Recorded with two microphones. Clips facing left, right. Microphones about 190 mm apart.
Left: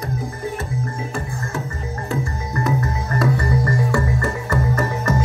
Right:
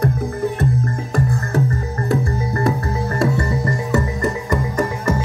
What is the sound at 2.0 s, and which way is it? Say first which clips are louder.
Music: right 6 dB; 30° right (ahead or behind).